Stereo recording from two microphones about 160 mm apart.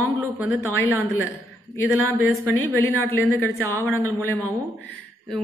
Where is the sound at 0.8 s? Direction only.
15° left (ahead or behind).